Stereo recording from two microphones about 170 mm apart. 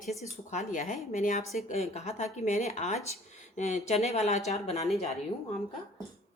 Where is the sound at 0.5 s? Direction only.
45° left (ahead or behind).